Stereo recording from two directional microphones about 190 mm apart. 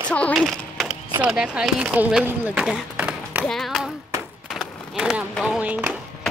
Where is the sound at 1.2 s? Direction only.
5° right (ahead or behind).